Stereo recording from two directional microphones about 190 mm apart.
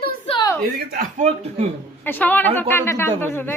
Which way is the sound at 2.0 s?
10° left (ahead or behind).